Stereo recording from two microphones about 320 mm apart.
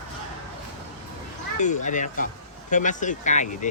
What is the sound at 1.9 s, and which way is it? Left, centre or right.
Speech, left.